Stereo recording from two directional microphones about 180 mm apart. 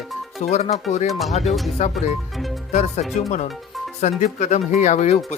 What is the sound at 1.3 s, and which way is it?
Speech, 40° left (ahead or behind).